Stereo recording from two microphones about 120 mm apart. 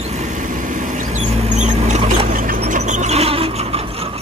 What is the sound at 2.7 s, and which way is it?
Vehicle, 90° right.